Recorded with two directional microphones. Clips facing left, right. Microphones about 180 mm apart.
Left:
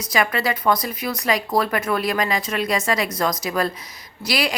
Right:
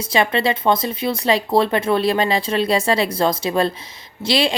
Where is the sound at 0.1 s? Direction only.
25° right (ahead or behind).